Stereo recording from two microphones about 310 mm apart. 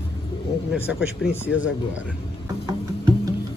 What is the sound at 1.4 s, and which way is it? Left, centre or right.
Speech, left.